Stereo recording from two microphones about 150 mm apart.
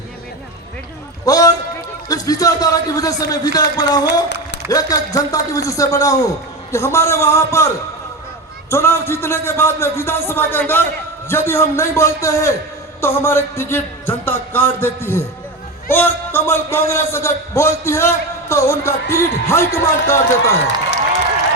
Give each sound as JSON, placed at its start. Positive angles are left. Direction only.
{"t": 1.2, "sound": "a sound", "side_deg": 25}
{"t": 2.0, "sound": "a man's voice", "side_deg": 25}
{"t": 8.7, "sound": "a man's voice", "side_deg": 15}